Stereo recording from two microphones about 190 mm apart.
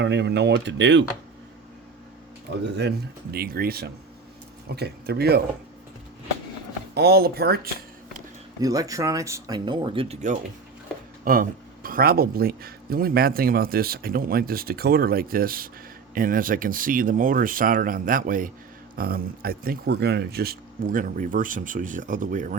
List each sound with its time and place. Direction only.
0.0 s speech: 65° right (ahead or behind)
2.6 s speech: 60° right (ahead or behind)
3.3 s speech: 50° right (ahead or behind)
6.9 s speech: 55° right (ahead or behind)
8.6 s speech: 20° right (ahead or behind); by 10.4 s 40° right (ahead or behind)
11.3 s speech: 50° right (ahead or behind)